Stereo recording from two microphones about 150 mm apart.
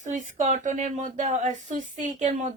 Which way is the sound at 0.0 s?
55° right (ahead or behind).